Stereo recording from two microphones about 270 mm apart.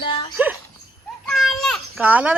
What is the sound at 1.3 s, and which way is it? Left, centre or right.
Children playing, centre.